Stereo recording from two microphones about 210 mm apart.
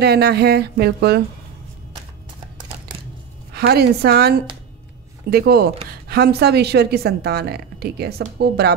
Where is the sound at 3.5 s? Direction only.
50° right (ahead or behind).